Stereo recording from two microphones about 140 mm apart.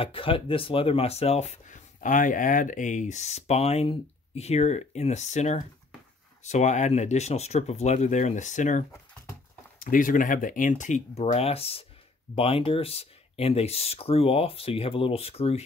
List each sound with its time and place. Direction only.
0.0 s speech: 40° left (ahead or behind); by 8.8 s 60° left (ahead or behind)
9.8 s speech: 75° left (ahead or behind)
11.3 s speech: 45° left (ahead or behind)